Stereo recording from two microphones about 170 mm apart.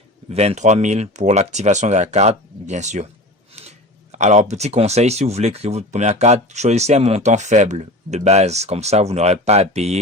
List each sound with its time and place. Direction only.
0.3 s speech: 40° right (ahead or behind)